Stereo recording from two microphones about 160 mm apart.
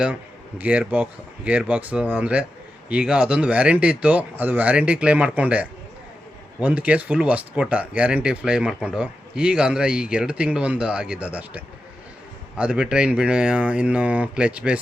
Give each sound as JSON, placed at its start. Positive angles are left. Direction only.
{"t": 0.6, "sound": "speech", "side_deg": -10}